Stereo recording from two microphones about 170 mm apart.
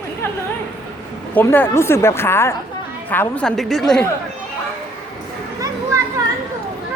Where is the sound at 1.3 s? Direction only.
10° left (ahead or behind).